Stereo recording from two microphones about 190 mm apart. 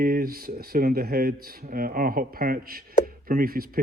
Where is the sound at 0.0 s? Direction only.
50° right (ahead or behind).